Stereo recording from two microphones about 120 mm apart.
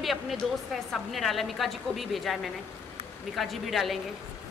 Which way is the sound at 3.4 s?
Centre (ahead or behind).